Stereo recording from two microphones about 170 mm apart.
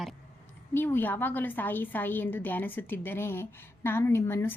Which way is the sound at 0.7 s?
10° left (ahead or behind).